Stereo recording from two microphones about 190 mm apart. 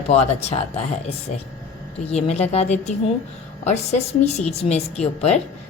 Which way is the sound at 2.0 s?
35° left (ahead or behind).